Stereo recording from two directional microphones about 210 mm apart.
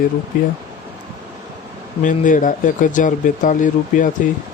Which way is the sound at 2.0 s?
40° left (ahead or behind).